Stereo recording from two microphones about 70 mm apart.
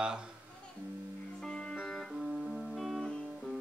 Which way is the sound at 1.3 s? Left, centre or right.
Centre.